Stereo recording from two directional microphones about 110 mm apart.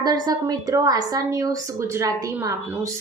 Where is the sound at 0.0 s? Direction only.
40° right (ahead or behind).